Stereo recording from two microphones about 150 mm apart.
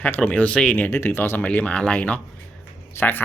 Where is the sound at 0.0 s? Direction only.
10° left (ahead or behind).